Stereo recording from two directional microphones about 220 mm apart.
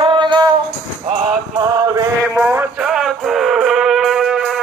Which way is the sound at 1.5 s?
15° right (ahead or behind).